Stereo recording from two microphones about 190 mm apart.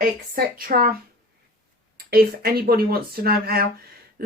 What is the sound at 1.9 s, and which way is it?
Speech, 50° right (ahead or behind).